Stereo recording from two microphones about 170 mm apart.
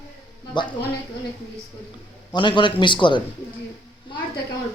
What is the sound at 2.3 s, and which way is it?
Speech, 30° left (ahead or behind).